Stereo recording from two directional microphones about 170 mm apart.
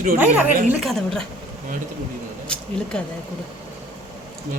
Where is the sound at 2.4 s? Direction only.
5° left (ahead or behind).